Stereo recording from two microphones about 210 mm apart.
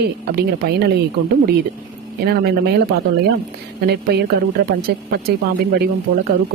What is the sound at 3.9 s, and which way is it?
Speech, 50° right (ahead or behind).